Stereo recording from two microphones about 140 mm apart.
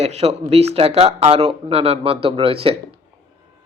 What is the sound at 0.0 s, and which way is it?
Speech, 45° right (ahead or behind).